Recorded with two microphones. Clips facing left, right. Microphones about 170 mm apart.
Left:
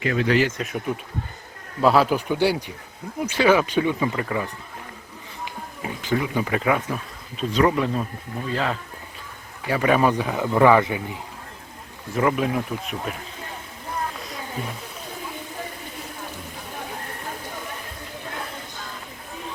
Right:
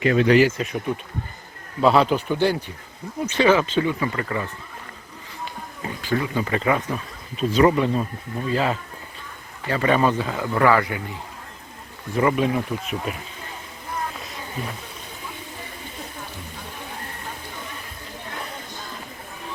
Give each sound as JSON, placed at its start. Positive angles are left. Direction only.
{"t": 0.0, "sound": "speech", "side_deg": -25}
{"t": 0.3, "sound": "speech", "side_deg": -5}
{"t": 1.8, "sound": "speech", "side_deg": 5}
{"t": 5.8, "sound": "speech", "side_deg": 15}
{"t": 9.6, "sound": "speech", "side_deg": 10}
{"t": 12.1, "sound": "speech", "side_deg": 0}